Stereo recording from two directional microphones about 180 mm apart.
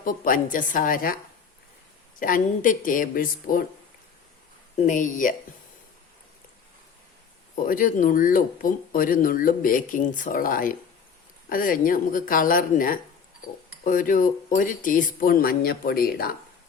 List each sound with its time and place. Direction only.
0.0 s speech: 50° left (ahead or behind)
2.1 s speech: 50° left (ahead or behind)
4.8 s speech: 45° left (ahead or behind)
7.6 s speech: 50° left (ahead or behind)